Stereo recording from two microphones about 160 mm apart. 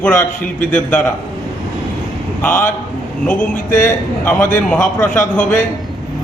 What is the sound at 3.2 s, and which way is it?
A man's voice, 10° left (ahead or behind).